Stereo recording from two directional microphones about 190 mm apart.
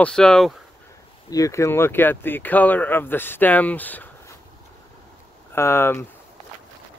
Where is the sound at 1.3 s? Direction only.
15° left (ahead or behind).